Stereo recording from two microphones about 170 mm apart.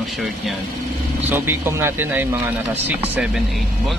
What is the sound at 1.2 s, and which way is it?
Speech, 15° right (ahead or behind).